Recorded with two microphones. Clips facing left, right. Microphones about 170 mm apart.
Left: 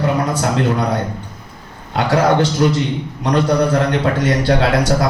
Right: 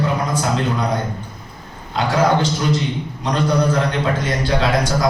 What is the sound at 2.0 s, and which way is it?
A man's voice, 70° left (ahead or behind).